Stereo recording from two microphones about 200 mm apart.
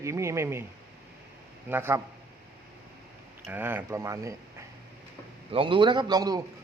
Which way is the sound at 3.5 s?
10° right (ahead or behind).